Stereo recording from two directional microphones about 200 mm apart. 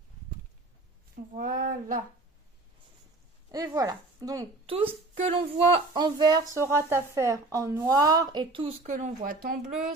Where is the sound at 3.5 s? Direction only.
20° right (ahead or behind); by 9.7 s 45° right (ahead or behind).